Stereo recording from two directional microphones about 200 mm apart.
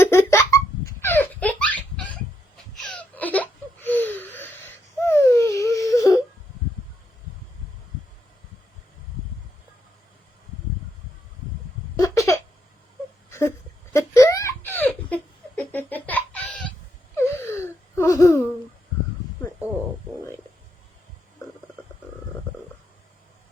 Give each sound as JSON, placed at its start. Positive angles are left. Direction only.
{"t": 0.0, "sound": "laughter", "side_deg": 15}
{"t": 1.0, "sound": "baby laughter", "side_deg": 10}
{"t": 2.7, "sound": "a sound", "side_deg": 0}
{"t": 11.9, "sound": "a sound", "side_deg": 15}
{"t": 13.3, "sound": "whimper", "side_deg": 15}
{"t": 13.9, "sound": "giggle", "side_deg": 15}
{"t": 17.2, "sound": "wheeze", "side_deg": 15}